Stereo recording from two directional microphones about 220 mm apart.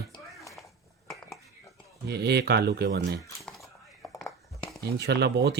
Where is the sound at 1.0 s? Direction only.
Centre (ahead or behind).